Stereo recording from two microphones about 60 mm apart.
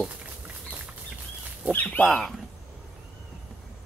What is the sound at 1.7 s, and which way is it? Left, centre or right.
Speech, left.